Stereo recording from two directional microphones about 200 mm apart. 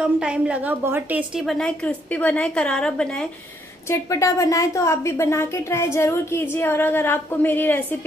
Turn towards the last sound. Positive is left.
turn(degrees=10)  # may be behind; listen again after turning